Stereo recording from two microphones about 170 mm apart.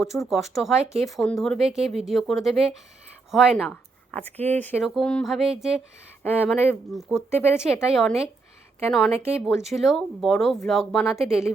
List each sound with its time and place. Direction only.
0.0 s speech: centre (ahead or behind)
6.4 s speech: 10° left (ahead or behind)
7.1 s speech: 10° right (ahead or behind)
9.1 s speech: 40° right (ahead or behind)
9.5 s speech: centre (ahead or behind)